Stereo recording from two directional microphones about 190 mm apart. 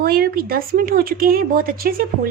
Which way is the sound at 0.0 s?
50° right (ahead or behind).